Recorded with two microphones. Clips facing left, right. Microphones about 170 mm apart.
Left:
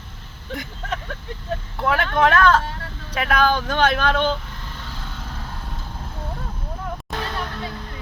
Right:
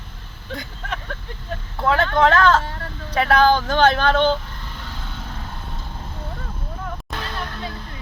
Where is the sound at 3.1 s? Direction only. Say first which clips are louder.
Right 4 dB; 35° right (ahead or behind).